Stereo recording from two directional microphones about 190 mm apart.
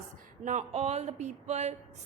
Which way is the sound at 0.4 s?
35° right (ahead or behind).